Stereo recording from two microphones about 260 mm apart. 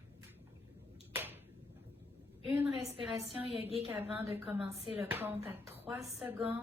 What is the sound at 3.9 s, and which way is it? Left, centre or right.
Speech, centre.